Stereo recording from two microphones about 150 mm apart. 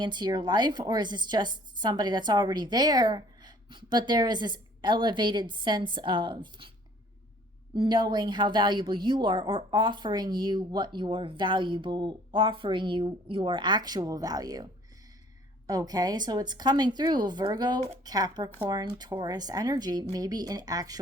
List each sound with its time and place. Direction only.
0.0 s a woman's voice: 30° right (ahead or behind)
7.8 s a woman's voice: 30° right (ahead or behind)